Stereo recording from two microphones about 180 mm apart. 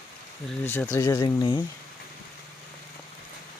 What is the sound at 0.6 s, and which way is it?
Speech, 10° left (ahead or behind).